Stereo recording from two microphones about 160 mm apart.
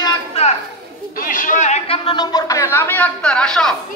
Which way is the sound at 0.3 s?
40° left (ahead or behind).